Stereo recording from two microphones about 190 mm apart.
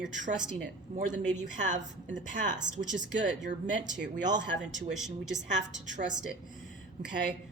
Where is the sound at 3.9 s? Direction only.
65° right (ahead or behind).